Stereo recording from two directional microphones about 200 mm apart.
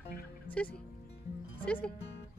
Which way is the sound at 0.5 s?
5° left (ahead or behind).